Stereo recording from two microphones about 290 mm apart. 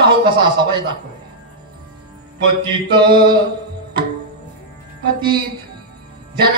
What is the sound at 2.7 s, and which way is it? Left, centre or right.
Speech, centre.